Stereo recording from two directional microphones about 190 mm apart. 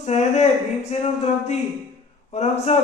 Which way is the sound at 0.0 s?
35° left (ahead or behind).